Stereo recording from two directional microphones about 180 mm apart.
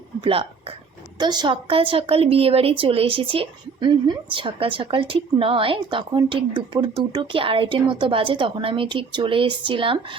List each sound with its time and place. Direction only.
0.2 s a woman's voice: 30° right (ahead or behind)